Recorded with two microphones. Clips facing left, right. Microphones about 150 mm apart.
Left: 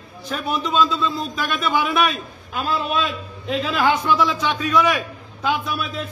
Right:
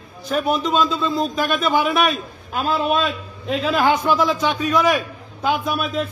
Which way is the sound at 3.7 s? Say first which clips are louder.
Right 2 dB; 45° right (ahead or behind).